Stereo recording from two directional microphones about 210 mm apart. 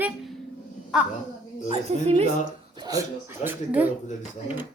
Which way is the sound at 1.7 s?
30° right (ahead or behind).